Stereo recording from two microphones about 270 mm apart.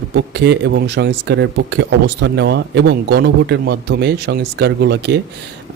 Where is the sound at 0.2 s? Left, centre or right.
Right.